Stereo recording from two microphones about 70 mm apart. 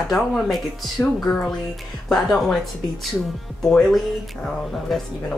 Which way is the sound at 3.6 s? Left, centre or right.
Centre.